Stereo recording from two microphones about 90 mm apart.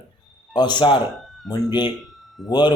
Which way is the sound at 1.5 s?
55° left (ahead or behind).